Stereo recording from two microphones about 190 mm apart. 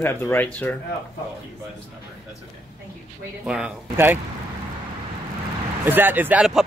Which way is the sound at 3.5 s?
5° right (ahead or behind).